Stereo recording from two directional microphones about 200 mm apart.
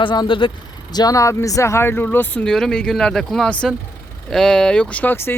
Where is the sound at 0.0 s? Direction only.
25° left (ahead or behind).